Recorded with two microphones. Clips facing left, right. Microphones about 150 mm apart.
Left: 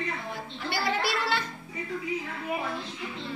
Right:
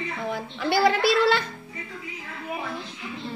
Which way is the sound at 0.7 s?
90° right.